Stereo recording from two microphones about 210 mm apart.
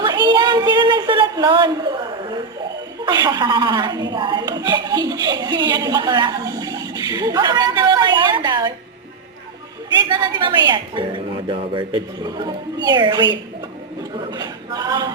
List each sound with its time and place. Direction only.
0.0 s a sound: 20° right (ahead or behind)
3.1 s a woman's voice: 20° right (ahead or behind)
10.1 s a woman's voice: 20° right (ahead or behind)
14.3 s a woman's voice: 20° right (ahead or behind)